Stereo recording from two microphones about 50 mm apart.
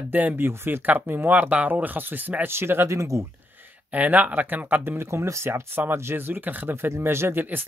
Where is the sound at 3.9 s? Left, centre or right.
Right.